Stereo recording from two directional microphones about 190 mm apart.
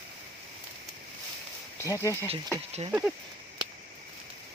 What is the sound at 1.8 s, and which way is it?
Speech, 15° left (ahead or behind).